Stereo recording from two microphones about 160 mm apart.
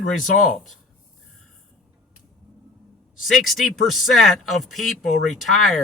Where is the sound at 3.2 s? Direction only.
Centre (ahead or behind).